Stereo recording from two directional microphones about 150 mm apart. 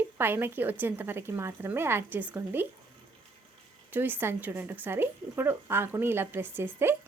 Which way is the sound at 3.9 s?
15° right (ahead or behind).